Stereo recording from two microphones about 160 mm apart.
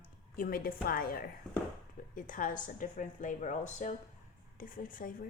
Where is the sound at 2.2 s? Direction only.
55° left (ahead or behind).